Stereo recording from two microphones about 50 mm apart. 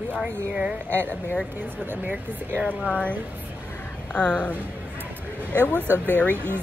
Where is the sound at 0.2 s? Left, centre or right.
Centre.